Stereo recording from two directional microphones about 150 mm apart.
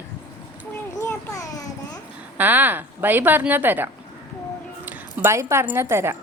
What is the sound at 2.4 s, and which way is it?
A woman's voice, 10° right (ahead or behind).